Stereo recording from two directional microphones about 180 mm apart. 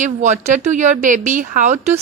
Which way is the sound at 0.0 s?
40° right (ahead or behind).